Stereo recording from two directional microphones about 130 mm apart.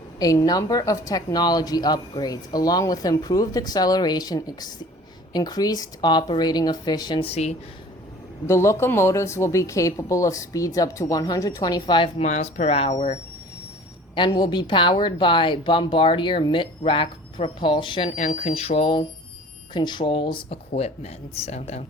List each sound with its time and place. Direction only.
0.2 s a woman's voice: 30° left (ahead or behind); by 7.5 s 50° left (ahead or behind)
8.4 s a woman's voice: 20° left (ahead or behind); by 12.1 s 40° left (ahead or behind)
12.2 s speech: 60° left (ahead or behind)
14.2 s speech: 35° left (ahead or behind)
18.3 s speech: 50° left (ahead or behind)